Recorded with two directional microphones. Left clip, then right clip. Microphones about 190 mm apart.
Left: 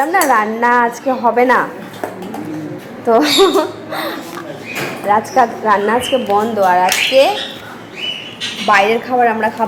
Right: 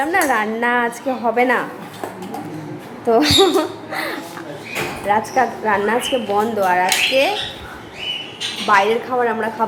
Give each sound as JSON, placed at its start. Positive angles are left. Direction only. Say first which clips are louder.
{"t": 0.0, "sound": "a woman's voice", "louder": "left 5 dB", "side_deg": -5}
{"t": 3.1, "sound": "a woman's voice", "louder": "left 3 dB", "side_deg": -5}
{"t": 8.6, "sound": "a woman's voice", "louder": "left 3 dB", "side_deg": 0}